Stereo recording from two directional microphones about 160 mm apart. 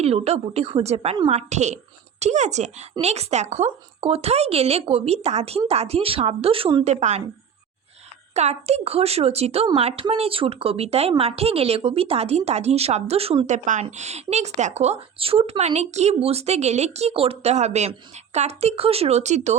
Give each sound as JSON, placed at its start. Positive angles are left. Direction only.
{"t": 0.0, "sound": "speech", "side_deg": -40}
{"t": 6.8, "sound": "speech", "side_deg": -45}
{"t": 8.3, "sound": "speech", "side_deg": -45}